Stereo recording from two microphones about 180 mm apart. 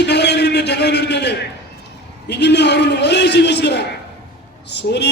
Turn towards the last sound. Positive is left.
turn(degrees=70)  # may be behind; listen again after turning